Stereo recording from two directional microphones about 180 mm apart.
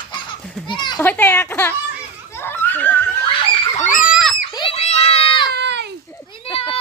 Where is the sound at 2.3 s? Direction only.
10° left (ahead or behind).